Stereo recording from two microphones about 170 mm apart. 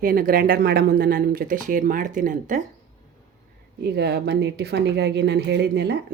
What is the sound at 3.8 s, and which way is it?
Speech, 75° right (ahead or behind).